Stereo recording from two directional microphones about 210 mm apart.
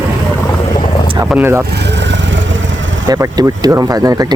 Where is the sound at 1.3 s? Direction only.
10° right (ahead or behind).